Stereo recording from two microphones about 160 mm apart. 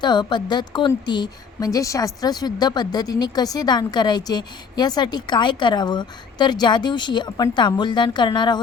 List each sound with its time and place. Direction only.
0.0 s a woman's voice: 30° left (ahead or behind)